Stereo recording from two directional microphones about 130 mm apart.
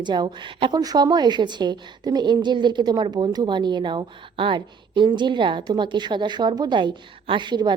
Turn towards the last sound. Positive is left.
turn(degrees=-35)  # may be behind; listen again after turning